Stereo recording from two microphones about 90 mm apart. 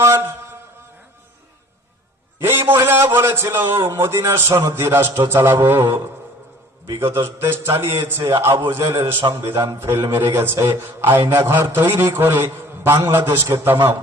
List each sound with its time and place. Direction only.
0.0 s mantra: 25° right (ahead or behind)
2.4 s a man's voice: 25° right (ahead or behind)